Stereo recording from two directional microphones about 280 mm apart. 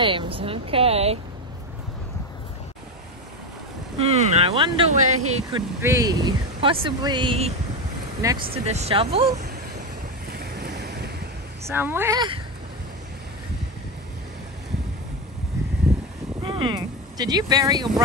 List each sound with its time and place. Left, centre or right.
0.0 s speech: centre
4.0 s speech: right
10.3 s vehicle: right
11.7 s speech: centre
16.4 s speech: centre